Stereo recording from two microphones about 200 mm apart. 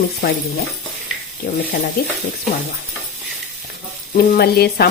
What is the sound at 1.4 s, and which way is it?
Speech, 45° left (ahead or behind).